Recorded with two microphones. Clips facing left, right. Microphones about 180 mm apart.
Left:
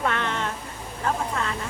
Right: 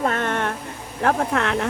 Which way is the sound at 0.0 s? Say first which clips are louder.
Right 4 dB; 45° right (ahead or behind).